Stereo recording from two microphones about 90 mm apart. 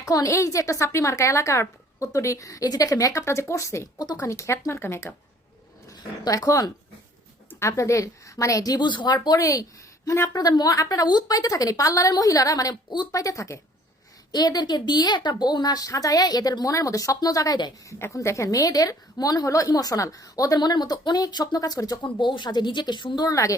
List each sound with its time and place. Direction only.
0.0 s speech: 40° left (ahead or behind)
6.2 s speech: 40° left (ahead or behind); by 9.1 s 60° left (ahead or behind)
9.1 s a woman's voice: 45° left (ahead or behind)
14.3 s a woman's voice: 45° left (ahead or behind)
22.0 s speech: 60° left (ahead or behind); by 23.6 s 40° left (ahead or behind)